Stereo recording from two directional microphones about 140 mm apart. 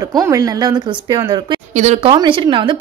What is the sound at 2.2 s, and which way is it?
Speech, 35° right (ahead or behind).